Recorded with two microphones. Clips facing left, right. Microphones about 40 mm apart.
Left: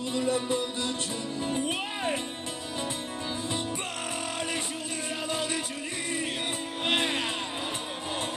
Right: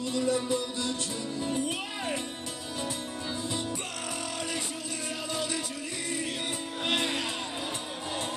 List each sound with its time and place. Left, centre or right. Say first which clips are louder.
0.1 s music: even; left
5.3 s music: left 2 dB; left
6.8 s music: left 2 dB; left